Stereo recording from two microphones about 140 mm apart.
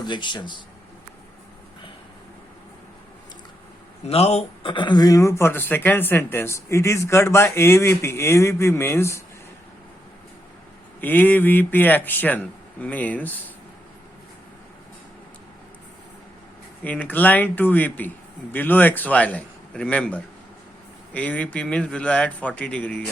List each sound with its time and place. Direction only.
0.0 s speech: 35° left (ahead or behind)
4.0 s speech: 45° left (ahead or behind); by 9.2 s 20° left (ahead or behind)
11.0 s a man's voice: 10° left (ahead or behind)
16.8 s a man's voice: 10° left (ahead or behind)